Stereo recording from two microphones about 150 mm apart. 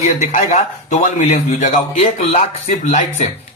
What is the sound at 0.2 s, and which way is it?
A man's voice, 50° left (ahead or behind).